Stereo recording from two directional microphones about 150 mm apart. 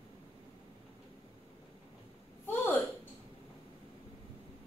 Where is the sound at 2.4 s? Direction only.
15° left (ahead or behind).